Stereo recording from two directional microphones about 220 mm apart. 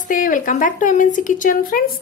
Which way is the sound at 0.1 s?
35° left (ahead or behind).